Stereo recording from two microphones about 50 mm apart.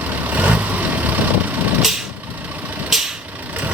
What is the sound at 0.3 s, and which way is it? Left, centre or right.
Vehicle, right.